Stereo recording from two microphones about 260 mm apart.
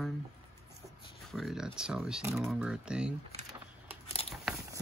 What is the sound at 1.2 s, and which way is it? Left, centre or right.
Speech, centre.